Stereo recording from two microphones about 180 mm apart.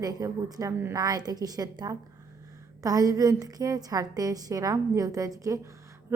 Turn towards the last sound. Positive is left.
turn(degrees=-15)  # may be behind; listen again after turning